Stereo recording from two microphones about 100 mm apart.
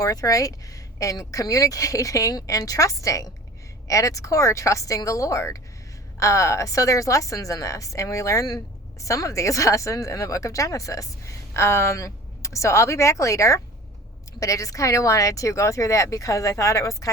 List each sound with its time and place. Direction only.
0.0 s a woman's voice: 35° left (ahead or behind)